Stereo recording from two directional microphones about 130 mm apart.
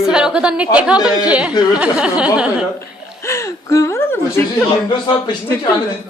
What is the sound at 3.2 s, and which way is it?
Speech, 25° left (ahead or behind).